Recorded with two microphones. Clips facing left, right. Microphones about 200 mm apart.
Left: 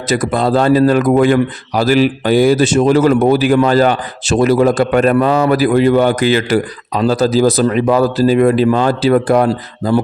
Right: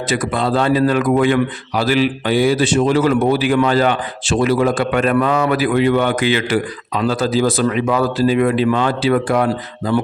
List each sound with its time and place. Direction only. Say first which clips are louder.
0.1 s a man's voice: left 5 dB; 40° left (ahead or behind)